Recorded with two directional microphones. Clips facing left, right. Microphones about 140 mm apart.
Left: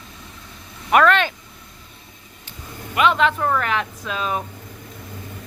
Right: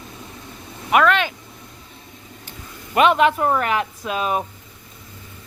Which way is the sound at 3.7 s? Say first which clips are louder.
Right 2 dB; 10° right (ahead or behind).